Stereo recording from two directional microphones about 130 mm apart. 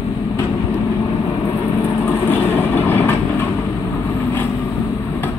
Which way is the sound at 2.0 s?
15° left (ahead or behind).